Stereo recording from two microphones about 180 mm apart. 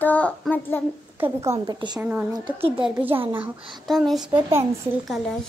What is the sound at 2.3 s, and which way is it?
Speech, 30° right (ahead or behind).